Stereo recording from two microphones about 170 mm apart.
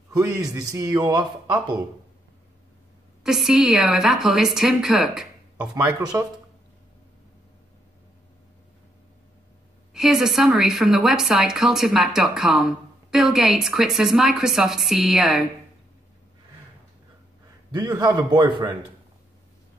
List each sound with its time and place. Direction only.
0.1 s a man's voice: 20° right (ahead or behind)
3.3 s a woman's voice: 5° right (ahead or behind)
9.9 s a woman's voice: 5° right (ahead or behind)
17.6 s a man's voice: 25° right (ahead or behind)